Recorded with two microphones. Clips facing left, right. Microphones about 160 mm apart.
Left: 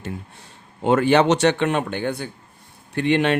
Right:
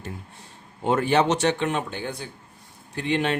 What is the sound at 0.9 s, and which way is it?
Speech, 85° left.